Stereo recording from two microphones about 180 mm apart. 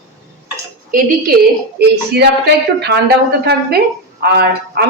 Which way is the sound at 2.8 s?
65° right (ahead or behind).